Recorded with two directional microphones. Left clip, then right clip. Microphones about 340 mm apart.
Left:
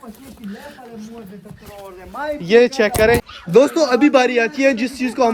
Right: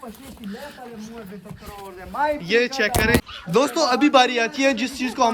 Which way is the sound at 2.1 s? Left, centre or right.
Right.